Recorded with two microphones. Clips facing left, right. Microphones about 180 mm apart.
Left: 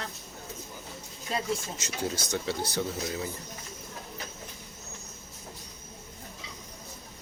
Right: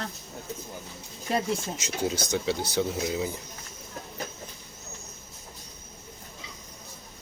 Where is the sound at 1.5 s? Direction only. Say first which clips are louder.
Right 2 dB; 20° right (ahead or behind).